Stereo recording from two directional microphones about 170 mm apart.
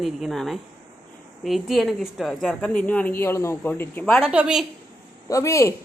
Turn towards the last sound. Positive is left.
turn(degrees=15)  # may be behind; listen again after turning